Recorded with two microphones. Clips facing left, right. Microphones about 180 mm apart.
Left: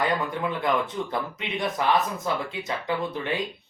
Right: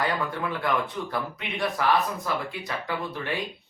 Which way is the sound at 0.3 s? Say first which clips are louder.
Left 2 dB; 20° left (ahead or behind).